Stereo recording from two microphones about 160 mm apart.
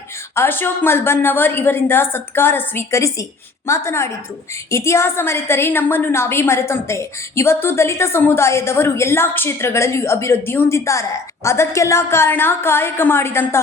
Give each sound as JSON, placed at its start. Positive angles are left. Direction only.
{"t": 0.3, "sound": "a woman's voice", "side_deg": 15}